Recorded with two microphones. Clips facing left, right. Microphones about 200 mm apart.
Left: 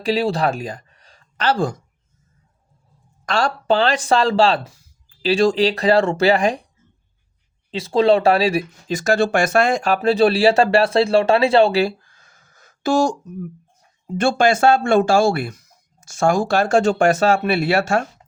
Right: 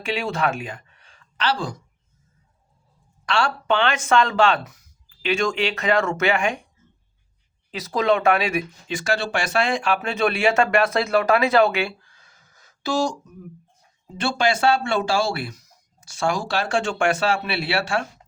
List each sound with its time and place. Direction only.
0.0 s speech: 35° left (ahead or behind)
3.2 s speech: 40° left (ahead or behind)
7.7 s speech: 30° left (ahead or behind); by 13.1 s 50° left (ahead or behind)
14.2 s speech: 50° left (ahead or behind)